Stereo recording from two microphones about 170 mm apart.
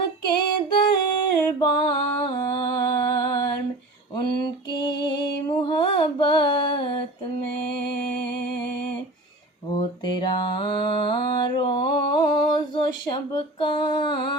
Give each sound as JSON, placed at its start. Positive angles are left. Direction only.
{"t": 0.3, "sound": "female singing", "side_deg": 25}
{"t": 1.3, "sound": "music", "side_deg": 25}
{"t": 4.1, "sound": "mantra", "side_deg": 25}
{"t": 9.7, "sound": "mantra", "side_deg": 25}